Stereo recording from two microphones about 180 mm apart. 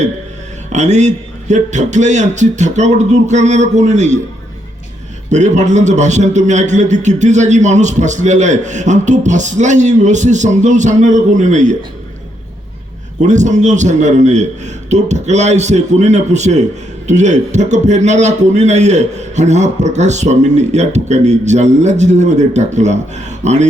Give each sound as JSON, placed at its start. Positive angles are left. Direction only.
{"t": 0.7, "sound": "a man's voice", "side_deg": -40}
{"t": 5.3, "sound": "a man's voice", "side_deg": -40}
{"t": 13.2, "sound": "a man's voice", "side_deg": -40}